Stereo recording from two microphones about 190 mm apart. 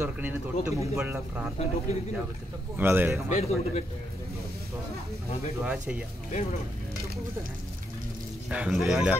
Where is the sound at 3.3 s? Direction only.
35° left (ahead or behind).